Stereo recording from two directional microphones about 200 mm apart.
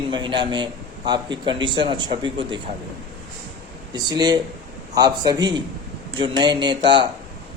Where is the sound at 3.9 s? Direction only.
20° right (ahead or behind).